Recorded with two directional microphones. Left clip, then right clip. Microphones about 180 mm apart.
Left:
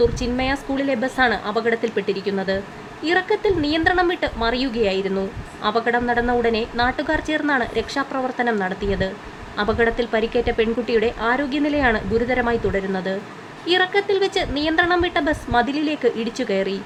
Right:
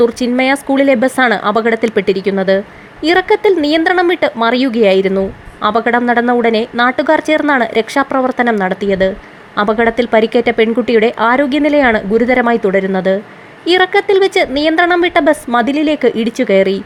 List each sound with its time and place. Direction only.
0.0 s speech: 40° right (ahead or behind)